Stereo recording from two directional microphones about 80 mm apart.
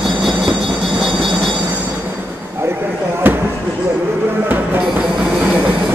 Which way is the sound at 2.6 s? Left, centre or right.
Right.